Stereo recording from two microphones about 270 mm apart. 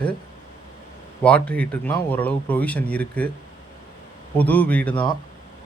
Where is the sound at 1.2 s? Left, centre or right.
Centre.